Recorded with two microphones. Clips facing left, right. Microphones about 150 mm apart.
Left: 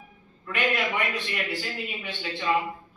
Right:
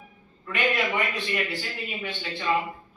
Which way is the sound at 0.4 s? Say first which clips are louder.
Right 1 dB; centre (ahead or behind).